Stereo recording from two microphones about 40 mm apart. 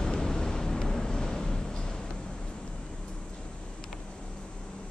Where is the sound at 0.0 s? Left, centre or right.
Centre.